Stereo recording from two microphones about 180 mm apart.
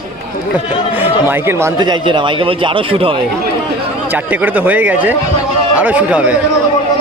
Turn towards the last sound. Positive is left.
turn(degrees=-10)  # may be behind; listen again after turning